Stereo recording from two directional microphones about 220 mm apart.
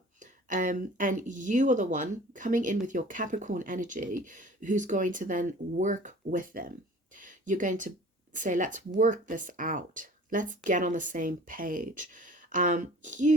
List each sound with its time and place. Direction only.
0.2 s speech: 35° right (ahead or behind)